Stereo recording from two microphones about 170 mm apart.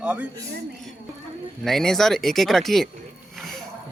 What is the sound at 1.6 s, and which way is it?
Speech, centre (ahead or behind).